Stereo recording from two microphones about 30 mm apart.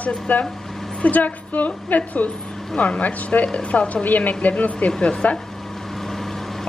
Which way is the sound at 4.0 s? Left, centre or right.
Left.